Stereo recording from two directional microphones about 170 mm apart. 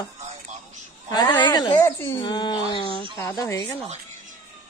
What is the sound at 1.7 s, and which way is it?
Speech, 15° left (ahead or behind).